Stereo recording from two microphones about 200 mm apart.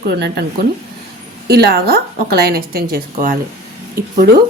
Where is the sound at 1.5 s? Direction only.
50° right (ahead or behind).